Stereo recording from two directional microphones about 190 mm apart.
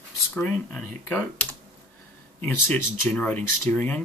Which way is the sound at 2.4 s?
10° left (ahead or behind).